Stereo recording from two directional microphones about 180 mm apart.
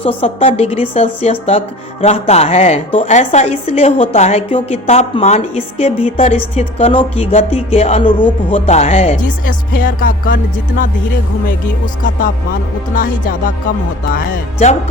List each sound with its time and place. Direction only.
0.0 s a woman's voice: 35° left (ahead or behind)
9.2 s speech: 50° left (ahead or behind)
12.9 s speech: 50° left (ahead or behind)